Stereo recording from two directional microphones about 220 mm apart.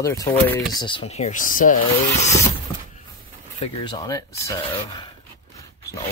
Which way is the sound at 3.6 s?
20° left (ahead or behind).